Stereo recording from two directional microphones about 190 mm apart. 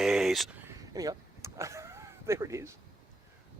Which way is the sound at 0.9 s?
20° right (ahead or behind).